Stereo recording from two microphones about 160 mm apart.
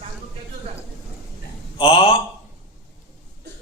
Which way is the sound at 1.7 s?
35° left (ahead or behind).